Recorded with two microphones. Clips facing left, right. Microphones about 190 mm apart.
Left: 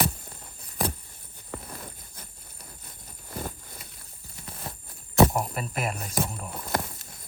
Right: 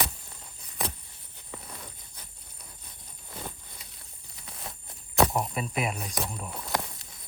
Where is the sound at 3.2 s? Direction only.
50° left (ahead or behind).